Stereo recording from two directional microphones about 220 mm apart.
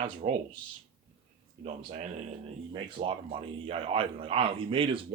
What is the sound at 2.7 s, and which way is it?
Speech, 25° right (ahead or behind).